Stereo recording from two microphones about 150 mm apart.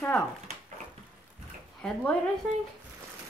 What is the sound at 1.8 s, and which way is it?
Speech, 10° left (ahead or behind).